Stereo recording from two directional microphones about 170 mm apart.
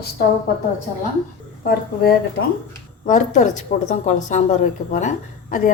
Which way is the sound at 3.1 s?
45° left (ahead or behind).